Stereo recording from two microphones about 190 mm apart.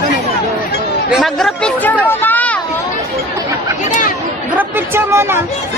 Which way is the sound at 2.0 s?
10° left (ahead or behind).